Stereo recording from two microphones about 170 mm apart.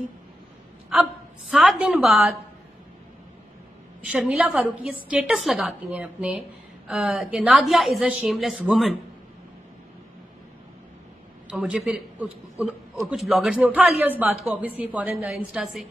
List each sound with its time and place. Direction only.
0.9 s a woman's voice: centre (ahead or behind)
4.0 s a woman's voice: 5° right (ahead or behind)
11.5 s a man's voice: 5° right (ahead or behind)